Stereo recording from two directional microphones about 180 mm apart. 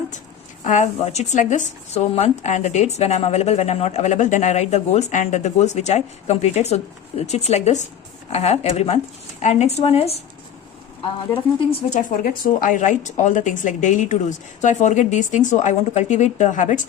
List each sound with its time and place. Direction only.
0.6 s speech: 40° left (ahead or behind)
11.7 s a woman's voice: 45° left (ahead or behind)